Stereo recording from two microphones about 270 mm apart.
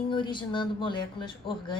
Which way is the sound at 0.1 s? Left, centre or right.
Centre.